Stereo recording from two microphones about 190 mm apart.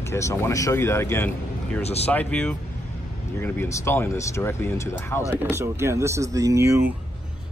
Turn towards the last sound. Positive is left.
turn(degrees=-15)  # may be behind; listen again after turning